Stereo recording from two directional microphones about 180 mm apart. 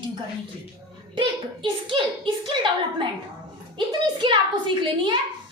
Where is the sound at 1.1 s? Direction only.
25° right (ahead or behind).